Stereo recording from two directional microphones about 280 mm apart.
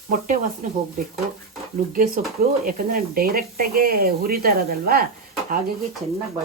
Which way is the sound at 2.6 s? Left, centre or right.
Right.